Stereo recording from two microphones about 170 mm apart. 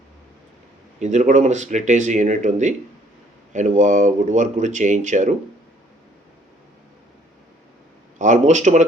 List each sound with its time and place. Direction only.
0.9 s speech: 45° right (ahead or behind)
8.2 s speech: 45° right (ahead or behind)